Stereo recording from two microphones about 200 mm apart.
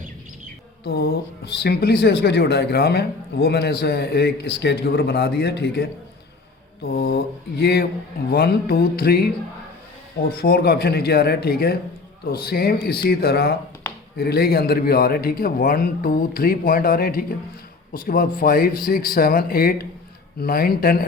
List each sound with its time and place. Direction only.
0.9 s speech: 50° left (ahead or behind)
10.2 s speech: 50° left (ahead or behind)